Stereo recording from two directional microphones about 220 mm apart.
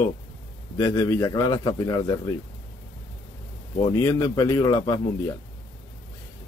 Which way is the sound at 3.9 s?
15° left (ahead or behind).